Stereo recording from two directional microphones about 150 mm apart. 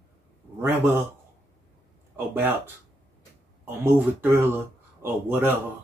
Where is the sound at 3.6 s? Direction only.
15° right (ahead or behind).